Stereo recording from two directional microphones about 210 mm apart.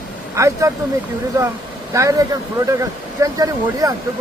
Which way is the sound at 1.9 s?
15° right (ahead or behind).